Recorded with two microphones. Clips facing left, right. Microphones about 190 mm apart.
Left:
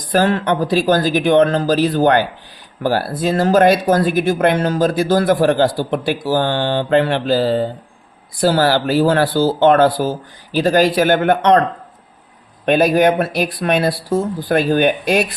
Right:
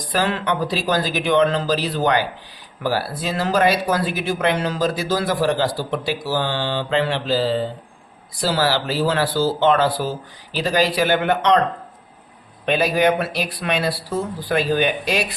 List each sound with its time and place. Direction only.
0.1 s speech: 45° left (ahead or behind)
12.6 s speech: 50° left (ahead or behind)